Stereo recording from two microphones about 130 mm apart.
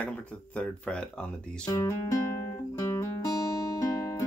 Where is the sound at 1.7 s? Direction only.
25° left (ahead or behind).